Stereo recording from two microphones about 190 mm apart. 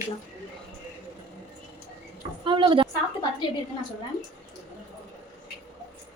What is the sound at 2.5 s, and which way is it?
Speech, 25° right (ahead or behind).